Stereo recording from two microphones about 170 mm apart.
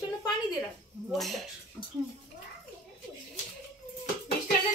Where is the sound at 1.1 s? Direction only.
Centre (ahead or behind).